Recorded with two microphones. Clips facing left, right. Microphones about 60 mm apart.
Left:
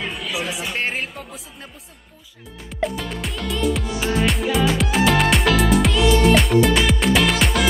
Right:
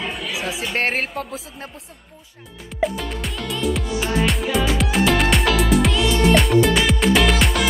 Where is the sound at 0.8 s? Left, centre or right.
Right.